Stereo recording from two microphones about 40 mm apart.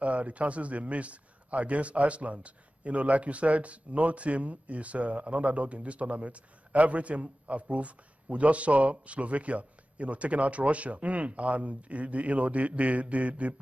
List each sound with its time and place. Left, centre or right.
0.0 s speech: right